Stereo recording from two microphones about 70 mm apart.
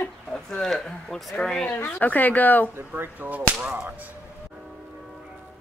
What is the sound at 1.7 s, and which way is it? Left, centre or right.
Speech, left.